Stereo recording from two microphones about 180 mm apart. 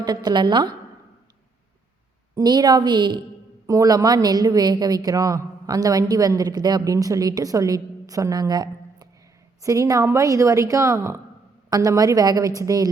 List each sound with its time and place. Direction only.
0.0 s a woman's voice: 20° right (ahead or behind)
2.3 s a woman's voice: 25° right (ahead or behind)